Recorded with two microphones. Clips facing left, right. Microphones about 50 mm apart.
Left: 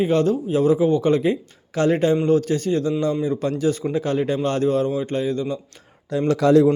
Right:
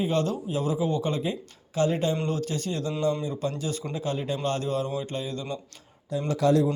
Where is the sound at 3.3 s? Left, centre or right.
Left.